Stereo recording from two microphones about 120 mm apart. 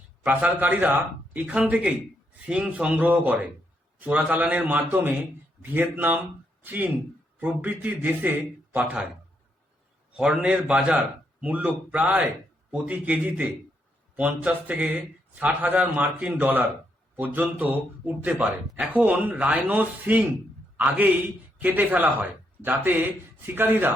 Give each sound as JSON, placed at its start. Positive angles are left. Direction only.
{"t": 0.3, "sound": "speech", "side_deg": -15}
{"t": 10.1, "sound": "speech", "side_deg": -5}
{"t": 21.6, "sound": "speech", "side_deg": -15}